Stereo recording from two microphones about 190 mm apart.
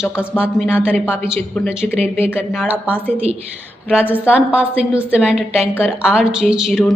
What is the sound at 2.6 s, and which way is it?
A woman's voice, 10° right (ahead or behind).